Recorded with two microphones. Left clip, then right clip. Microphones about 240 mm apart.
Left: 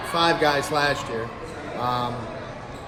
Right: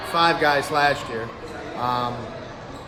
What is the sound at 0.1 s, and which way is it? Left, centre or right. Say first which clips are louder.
A man's voice: right 2 dB; centre.